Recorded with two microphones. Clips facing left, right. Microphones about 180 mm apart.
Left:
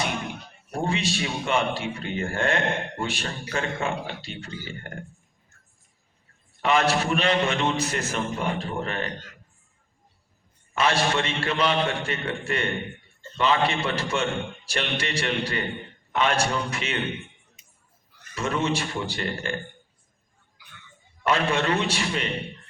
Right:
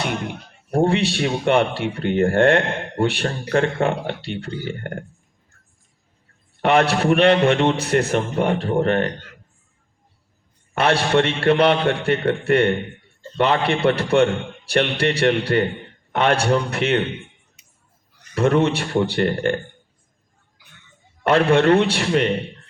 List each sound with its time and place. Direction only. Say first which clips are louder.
0.7 s a man's voice: right 8 dB; 60° right (ahead or behind)
6.6 s a man's voice: right 5 dB; 60° right (ahead or behind)
10.8 s a man's voice: right 6 dB; 60° right (ahead or behind)
18.3 s a man's voice: right 8 dB; 60° right (ahead or behind)
21.2 s a man's voice: right 9 dB; 60° right (ahead or behind)